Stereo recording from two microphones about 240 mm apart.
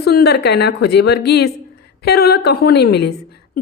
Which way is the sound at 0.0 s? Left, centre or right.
Left.